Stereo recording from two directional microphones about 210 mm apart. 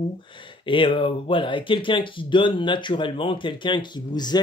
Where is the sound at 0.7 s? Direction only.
25° left (ahead or behind).